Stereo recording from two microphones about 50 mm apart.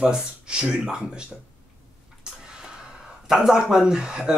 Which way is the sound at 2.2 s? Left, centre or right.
Centre.